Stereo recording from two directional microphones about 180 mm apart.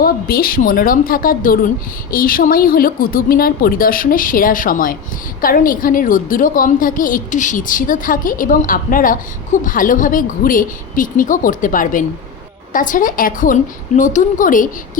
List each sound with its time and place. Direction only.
0.0 s a woman's voice: 55° left (ahead or behind)